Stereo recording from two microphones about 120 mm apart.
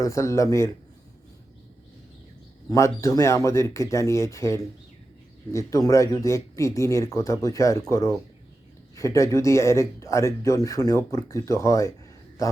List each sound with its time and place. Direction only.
0.0 s speech: 25° left (ahead or behind)
2.6 s speech: 25° left (ahead or behind)